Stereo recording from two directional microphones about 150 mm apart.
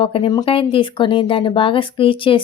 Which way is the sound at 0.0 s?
35° left (ahead or behind).